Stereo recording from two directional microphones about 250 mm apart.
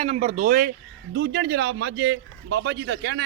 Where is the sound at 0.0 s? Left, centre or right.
Right.